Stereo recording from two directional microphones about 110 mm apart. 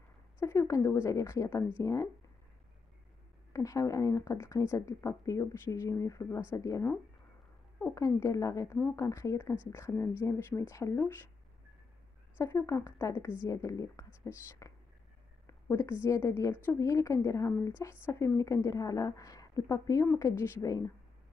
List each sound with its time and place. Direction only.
0.4 s a woman's voice: 25° left (ahead or behind)
3.5 s speech: 30° left (ahead or behind)
7.9 s speech: 30° left (ahead or behind)
12.4 s a woman's voice: 25° left (ahead or behind)